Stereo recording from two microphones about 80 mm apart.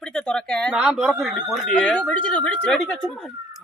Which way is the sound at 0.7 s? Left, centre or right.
Centre.